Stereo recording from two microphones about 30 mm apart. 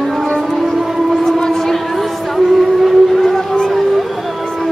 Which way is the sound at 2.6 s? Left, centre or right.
Centre.